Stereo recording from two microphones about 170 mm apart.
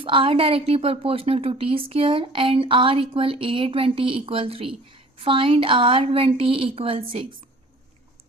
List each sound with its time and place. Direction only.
0.0 s speech: 30° right (ahead or behind)